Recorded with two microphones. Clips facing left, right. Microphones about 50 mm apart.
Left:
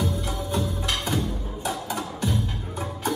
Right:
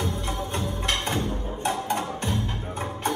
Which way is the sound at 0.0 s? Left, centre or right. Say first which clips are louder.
Left 1 dB; right.